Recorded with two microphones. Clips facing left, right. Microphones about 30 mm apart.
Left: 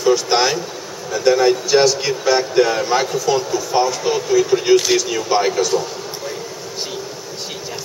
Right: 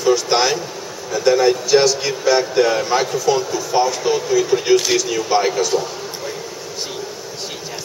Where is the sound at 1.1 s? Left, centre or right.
Centre.